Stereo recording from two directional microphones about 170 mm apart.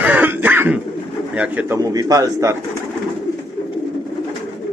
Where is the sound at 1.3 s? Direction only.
10° right (ahead or behind).